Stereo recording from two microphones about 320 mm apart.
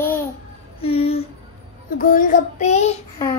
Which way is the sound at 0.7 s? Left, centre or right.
Centre.